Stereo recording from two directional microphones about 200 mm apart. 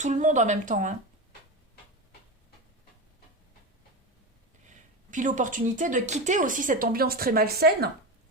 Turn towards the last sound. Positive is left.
turn(degrees=-50)  # may be behind; listen again after turning